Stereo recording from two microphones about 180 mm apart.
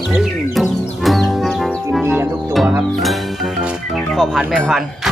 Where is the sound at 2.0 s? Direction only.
10° right (ahead or behind).